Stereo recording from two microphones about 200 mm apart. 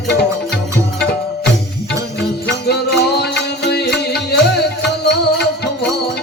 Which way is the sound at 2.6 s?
55° left (ahead or behind).